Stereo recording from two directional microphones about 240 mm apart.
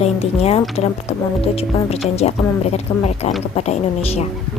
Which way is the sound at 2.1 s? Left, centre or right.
Left.